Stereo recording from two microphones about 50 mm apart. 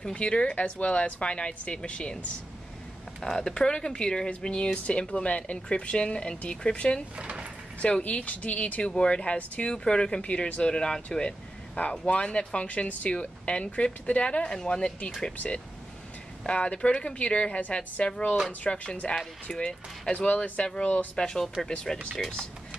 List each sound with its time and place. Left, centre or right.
0.0 s speech: left
7.2 s speech: centre
8.0 s speech: left
15.3 s speech: left
21.2 s speech: centre